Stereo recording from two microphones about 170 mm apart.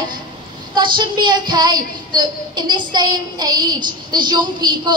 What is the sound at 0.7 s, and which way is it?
A woman's voice, 25° right (ahead or behind).